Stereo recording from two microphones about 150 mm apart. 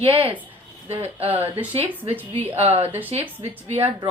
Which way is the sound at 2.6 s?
40° right (ahead or behind).